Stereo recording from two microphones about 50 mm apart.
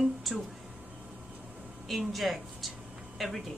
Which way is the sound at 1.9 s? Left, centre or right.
Centre.